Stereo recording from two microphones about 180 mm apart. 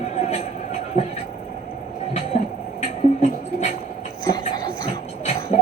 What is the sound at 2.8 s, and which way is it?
Music, 40° left (ahead or behind).